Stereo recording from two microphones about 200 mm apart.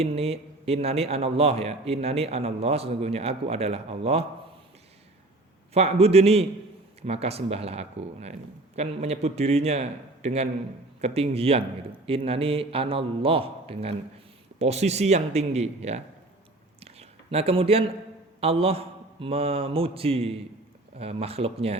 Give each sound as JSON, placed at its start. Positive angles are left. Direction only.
{"t": 0.0, "sound": "a man's voice", "side_deg": -30}
{"t": 5.7, "sound": "a man's voice", "side_deg": -30}
{"t": 16.8, "sound": "a sound", "side_deg": -30}
{"t": 18.3, "sound": "a man's voice", "side_deg": -30}